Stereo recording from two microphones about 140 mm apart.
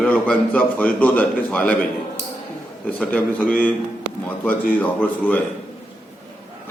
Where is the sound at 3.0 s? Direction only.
10° left (ahead or behind).